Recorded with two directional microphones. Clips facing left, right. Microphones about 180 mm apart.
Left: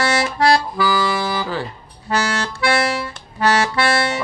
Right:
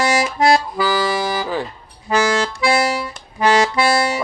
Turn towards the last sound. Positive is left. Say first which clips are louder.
# right 2 dB
turn(degrees=-15)  # may be behind; listen again after turning